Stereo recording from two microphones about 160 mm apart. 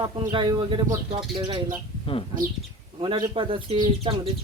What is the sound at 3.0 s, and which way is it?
Speech, 30° right (ahead or behind).